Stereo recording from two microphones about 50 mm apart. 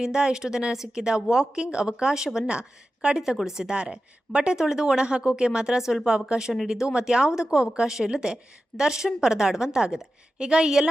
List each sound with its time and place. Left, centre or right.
0.0 s a woman's voice: centre
3.2 s speech: centre